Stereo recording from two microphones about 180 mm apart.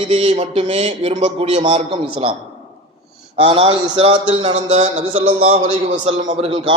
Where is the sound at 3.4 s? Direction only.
30° right (ahead or behind).